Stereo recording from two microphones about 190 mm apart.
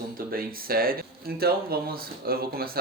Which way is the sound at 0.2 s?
50° right (ahead or behind).